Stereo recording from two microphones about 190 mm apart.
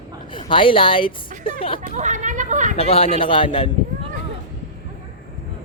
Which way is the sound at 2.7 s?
30° left (ahead or behind).